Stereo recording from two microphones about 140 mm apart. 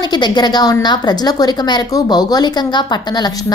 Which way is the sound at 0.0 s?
30° left (ahead or behind).